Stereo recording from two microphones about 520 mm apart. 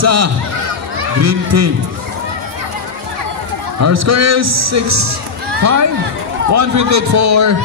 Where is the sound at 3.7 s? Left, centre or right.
Right.